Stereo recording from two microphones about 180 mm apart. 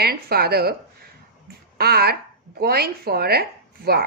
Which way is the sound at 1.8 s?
60° right (ahead or behind).